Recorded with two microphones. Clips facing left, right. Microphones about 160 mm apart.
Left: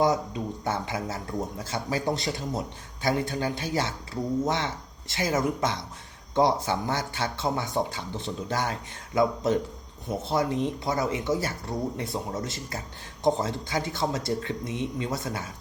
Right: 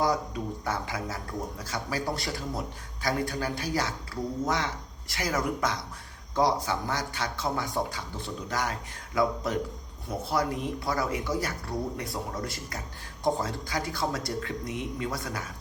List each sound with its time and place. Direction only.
0.0 s speech: 20° left (ahead or behind)